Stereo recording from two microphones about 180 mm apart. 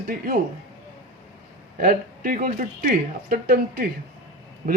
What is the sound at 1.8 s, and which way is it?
A man's voice, 50° right (ahead or behind).